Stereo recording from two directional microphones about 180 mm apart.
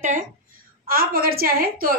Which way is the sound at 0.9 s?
55° right (ahead or behind).